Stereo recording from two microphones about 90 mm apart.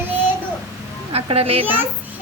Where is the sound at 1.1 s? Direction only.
90° right.